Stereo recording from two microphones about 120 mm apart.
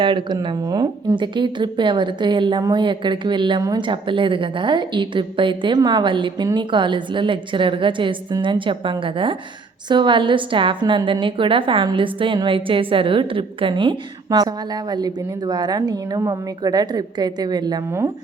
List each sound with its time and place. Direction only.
0.0 s a woman's voice: 40° right (ahead or behind)